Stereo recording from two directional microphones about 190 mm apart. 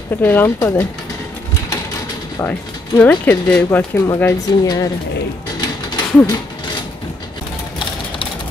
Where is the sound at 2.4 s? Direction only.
10° left (ahead or behind).